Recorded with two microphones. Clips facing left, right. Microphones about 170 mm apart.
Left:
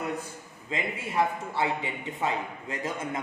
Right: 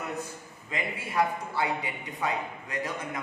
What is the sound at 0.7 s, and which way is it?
A man's voice, 25° left (ahead or behind).